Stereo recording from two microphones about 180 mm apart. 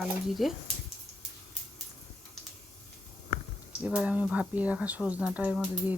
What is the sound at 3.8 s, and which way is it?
Speech, 5° right (ahead or behind).